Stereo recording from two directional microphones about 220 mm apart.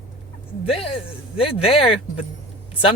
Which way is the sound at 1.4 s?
25° left (ahead or behind).